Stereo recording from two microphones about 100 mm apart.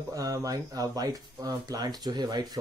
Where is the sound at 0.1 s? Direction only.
35° right (ahead or behind).